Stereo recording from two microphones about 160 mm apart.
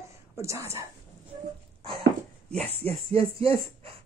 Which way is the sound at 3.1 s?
35° right (ahead or behind).